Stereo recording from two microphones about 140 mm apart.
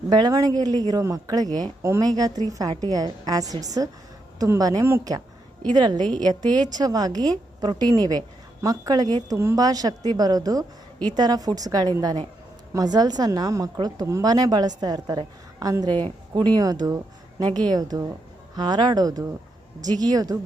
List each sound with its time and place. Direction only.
0.1 s a woman's voice: 25° right (ahead or behind)